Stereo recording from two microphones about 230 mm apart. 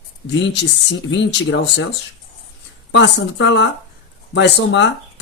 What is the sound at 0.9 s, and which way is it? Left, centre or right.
Speech, left.